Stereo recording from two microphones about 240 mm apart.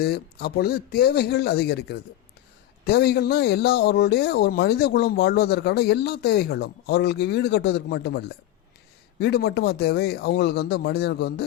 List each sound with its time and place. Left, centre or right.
0.0 s speech: left